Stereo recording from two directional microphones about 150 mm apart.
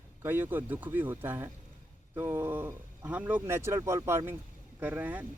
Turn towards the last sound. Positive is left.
turn(degrees=-10)  # may be behind; listen again after turning